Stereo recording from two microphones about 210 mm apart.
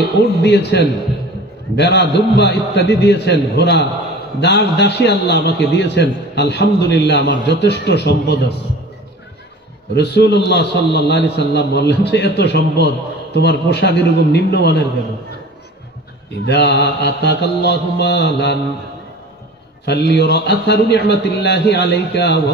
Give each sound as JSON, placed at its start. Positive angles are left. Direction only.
{"t": 0.4, "sound": "a man's voice", "side_deg": 55}
{"t": 9.9, "sound": "a man's voice", "side_deg": 50}
{"t": 16.4, "sound": "a man's voice", "side_deg": 55}
{"t": 19.8, "sound": "a man's voice", "side_deg": 50}